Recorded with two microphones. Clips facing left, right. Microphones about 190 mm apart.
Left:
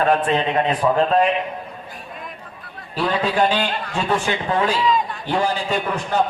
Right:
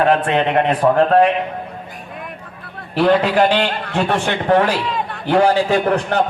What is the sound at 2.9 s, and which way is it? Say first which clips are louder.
A man's voice: right 7 dB; 65° right (ahead or behind).